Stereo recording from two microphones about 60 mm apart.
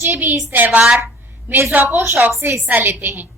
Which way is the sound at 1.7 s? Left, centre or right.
Right.